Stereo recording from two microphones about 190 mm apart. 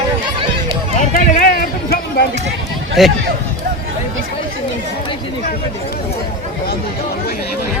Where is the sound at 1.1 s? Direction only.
45° left (ahead or behind).